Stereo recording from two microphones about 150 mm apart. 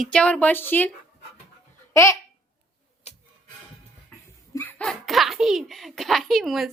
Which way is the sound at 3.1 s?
45° left (ahead or behind).